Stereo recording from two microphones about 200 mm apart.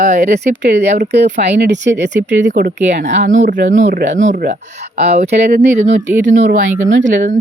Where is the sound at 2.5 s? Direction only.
50° right (ahead or behind).